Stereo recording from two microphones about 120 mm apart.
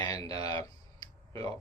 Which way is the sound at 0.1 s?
30° left (ahead or behind).